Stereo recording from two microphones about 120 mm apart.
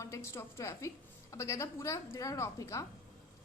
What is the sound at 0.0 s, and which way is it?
A woman's voice, 25° left (ahead or behind).